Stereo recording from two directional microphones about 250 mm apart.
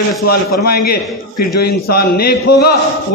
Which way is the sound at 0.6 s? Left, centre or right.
Left.